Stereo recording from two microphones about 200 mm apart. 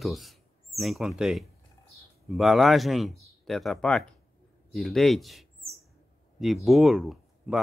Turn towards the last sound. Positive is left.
turn(degrees=0)  # may be behind; listen again after turning